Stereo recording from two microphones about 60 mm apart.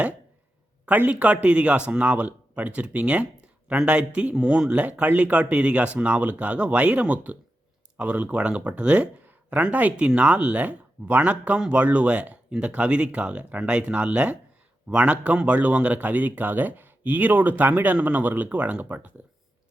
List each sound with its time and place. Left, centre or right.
0.9 s a man's voice: right